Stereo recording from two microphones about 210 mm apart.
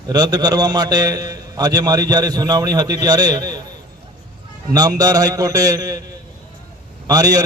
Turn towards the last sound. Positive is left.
turn(degrees=-15)  # may be behind; listen again after turning